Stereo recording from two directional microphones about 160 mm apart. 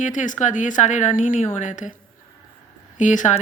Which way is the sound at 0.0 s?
50° left (ahead or behind).